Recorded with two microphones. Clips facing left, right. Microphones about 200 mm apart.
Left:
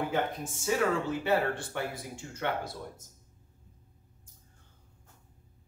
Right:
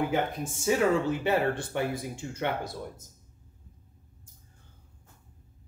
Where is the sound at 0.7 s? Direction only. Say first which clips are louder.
Right 4 dB; 15° right (ahead or behind).